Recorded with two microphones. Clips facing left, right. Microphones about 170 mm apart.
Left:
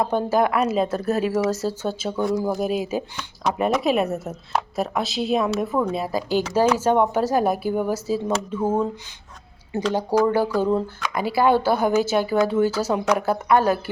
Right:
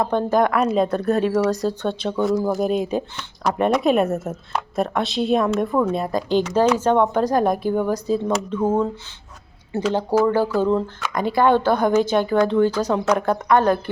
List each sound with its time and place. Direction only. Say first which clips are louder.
0.0 s a woman's voice: right 2 dB; 10° left (ahead or behind)